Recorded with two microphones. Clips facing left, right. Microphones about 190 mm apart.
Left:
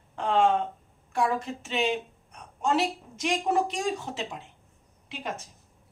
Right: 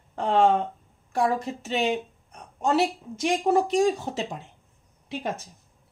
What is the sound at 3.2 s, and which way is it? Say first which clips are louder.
Speech: right 4 dB; 35° right (ahead or behind).